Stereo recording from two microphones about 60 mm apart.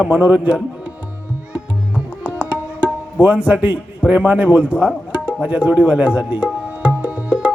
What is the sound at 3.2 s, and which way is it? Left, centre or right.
Speech, right.